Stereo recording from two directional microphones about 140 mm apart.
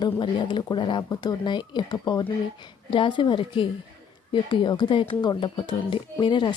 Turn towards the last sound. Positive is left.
turn(degrees=35)  # may be behind; listen again after turning